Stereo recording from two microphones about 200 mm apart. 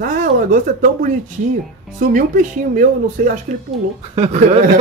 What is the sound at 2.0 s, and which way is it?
Speech, 40° right (ahead or behind).